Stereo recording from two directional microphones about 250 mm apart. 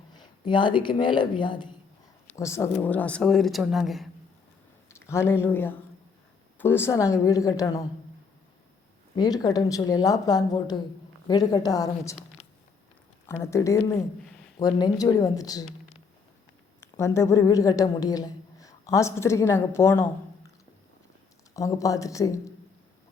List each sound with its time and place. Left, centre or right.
0.1 s a woman's voice: centre
4.9 s speech: centre
9.1 s speech: centre
13.4 s speech: centre
16.8 s a woman's voice: centre
21.5 s speech: centre